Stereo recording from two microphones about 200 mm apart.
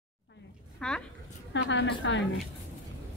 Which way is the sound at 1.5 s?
65° left (ahead or behind).